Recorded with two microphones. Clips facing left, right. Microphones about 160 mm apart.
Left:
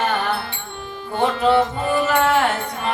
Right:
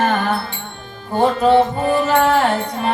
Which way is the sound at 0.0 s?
45° right (ahead or behind).